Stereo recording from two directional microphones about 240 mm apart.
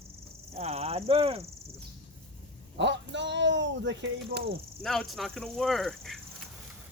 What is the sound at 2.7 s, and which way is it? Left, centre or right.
Speech, right.